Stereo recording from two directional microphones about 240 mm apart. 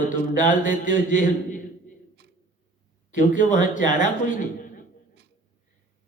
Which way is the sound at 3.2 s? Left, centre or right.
Left.